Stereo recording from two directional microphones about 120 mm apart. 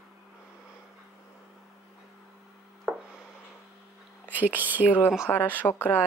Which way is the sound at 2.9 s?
5° left (ahead or behind).